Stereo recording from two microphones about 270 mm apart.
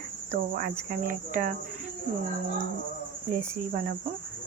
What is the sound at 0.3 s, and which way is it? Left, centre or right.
Cricket, right.